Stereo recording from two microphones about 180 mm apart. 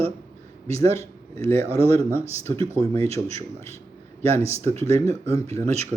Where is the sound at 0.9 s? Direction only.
15° left (ahead or behind).